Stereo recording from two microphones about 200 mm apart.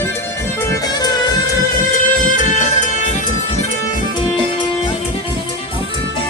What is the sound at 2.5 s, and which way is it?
Music, 40° left (ahead or behind).